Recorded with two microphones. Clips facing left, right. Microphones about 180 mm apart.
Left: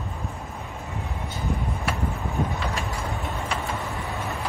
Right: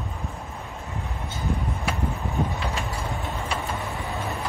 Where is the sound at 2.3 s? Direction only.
Centre (ahead or behind).